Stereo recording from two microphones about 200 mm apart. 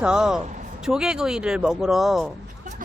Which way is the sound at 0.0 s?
5° right (ahead or behind).